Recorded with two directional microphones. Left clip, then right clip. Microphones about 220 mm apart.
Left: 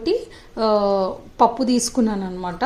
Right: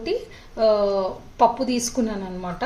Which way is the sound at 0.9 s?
25° left (ahead or behind).